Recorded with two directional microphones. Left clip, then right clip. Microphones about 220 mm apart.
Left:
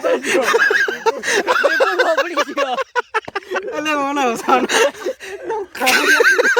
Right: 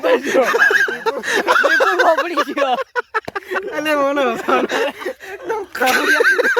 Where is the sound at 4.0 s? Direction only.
35° left (ahead or behind).